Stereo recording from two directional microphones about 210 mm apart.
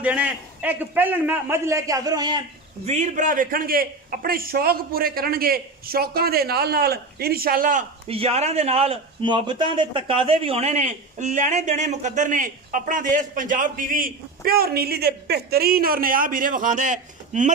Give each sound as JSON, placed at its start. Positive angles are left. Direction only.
{"t": 0.0, "sound": "a man's voice", "side_deg": -5}
{"t": 2.8, "sound": "a man's voice", "side_deg": -30}
{"t": 8.1, "sound": "a man's voice", "side_deg": -30}